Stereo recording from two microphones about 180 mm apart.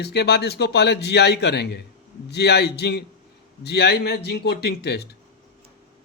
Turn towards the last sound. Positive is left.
turn(degrees=65)  # may be behind; listen again after turning